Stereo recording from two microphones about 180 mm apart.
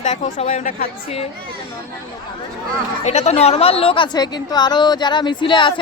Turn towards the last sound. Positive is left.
turn(degrees=25)  # may be behind; listen again after turning